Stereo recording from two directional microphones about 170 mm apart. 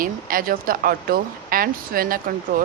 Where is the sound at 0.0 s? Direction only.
55° right (ahead or behind).